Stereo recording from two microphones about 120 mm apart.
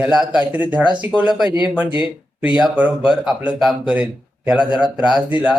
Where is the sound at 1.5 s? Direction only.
40° left (ahead or behind).